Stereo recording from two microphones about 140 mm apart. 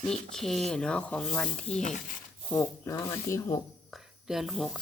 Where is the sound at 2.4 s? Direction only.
10° left (ahead or behind).